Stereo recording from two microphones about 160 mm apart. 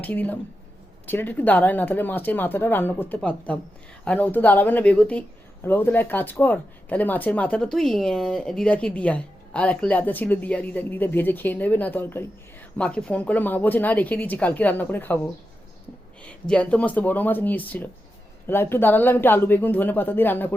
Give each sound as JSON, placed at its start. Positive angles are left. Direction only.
{"t": 0.0, "sound": "speech", "side_deg": 10}
{"t": 16.5, "sound": "speech", "side_deg": 10}